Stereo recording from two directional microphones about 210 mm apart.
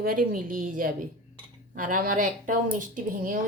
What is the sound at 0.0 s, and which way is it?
A woman's voice, 45° right (ahead or behind).